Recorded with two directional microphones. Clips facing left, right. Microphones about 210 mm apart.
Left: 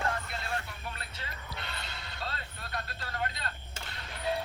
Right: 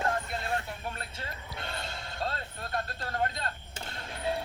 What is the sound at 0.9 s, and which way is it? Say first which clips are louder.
Music: right 4 dB; 45° right (ahead or behind).